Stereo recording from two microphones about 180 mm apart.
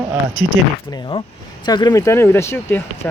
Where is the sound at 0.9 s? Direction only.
25° left (ahead or behind).